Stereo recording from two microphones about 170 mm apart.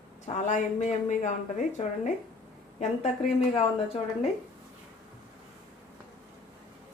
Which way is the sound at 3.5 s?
35° left (ahead or behind).